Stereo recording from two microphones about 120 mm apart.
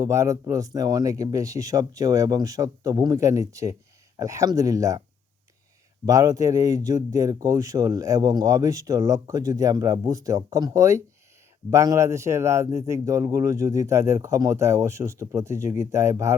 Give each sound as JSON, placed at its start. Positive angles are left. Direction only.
{"t": 0.0, "sound": "speech", "side_deg": -25}
{"t": 6.1, "sound": "speech", "side_deg": -30}